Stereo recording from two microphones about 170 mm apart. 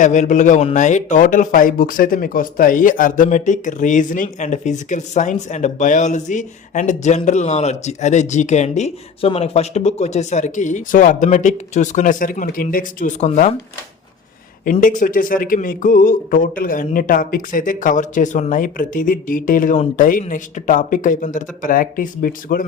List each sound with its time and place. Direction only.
0.0 s speech: 45° left (ahead or behind)
14.6 s speech: 50° left (ahead or behind)